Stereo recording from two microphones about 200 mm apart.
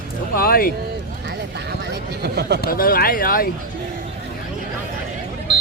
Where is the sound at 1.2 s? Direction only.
60° right (ahead or behind).